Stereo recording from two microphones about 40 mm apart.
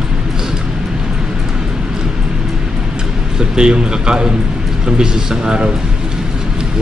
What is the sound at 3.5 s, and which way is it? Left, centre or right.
Speech, centre.